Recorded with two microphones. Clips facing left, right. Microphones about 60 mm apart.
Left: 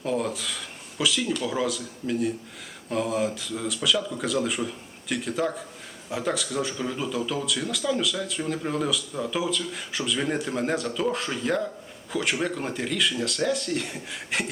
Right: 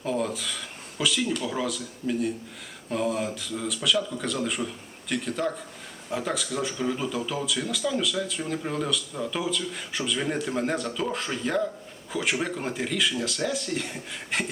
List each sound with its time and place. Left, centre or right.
0.0 s speech: centre